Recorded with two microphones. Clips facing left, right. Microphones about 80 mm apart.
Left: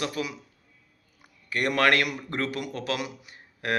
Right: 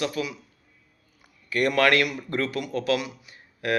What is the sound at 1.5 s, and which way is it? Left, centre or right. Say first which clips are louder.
Speech: right 2 dB; left.